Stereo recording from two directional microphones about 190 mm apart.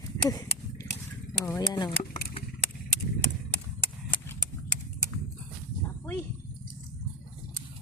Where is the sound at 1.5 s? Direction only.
20° left (ahead or behind).